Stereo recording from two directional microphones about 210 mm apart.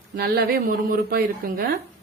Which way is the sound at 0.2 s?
45° right (ahead or behind).